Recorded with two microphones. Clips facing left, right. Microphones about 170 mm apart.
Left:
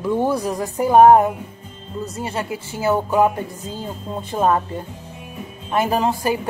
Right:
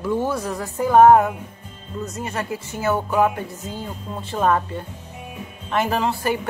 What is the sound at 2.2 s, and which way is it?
Speech, 30° left (ahead or behind).